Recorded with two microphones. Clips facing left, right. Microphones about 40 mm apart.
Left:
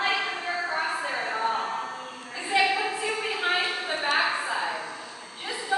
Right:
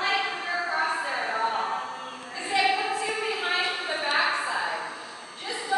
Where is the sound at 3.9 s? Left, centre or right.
Centre.